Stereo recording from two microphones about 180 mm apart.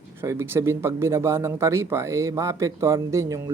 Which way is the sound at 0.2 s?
15° right (ahead or behind).